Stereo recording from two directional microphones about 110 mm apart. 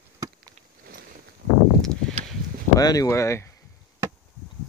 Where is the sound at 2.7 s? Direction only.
35° left (ahead or behind).